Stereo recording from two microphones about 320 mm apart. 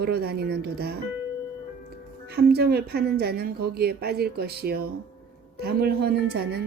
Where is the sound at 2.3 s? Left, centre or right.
Right.